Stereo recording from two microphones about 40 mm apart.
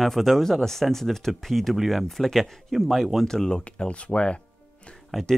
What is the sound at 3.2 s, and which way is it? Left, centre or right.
Speech, centre.